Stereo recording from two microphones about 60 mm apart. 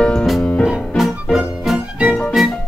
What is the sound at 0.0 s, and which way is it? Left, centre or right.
Music, centre.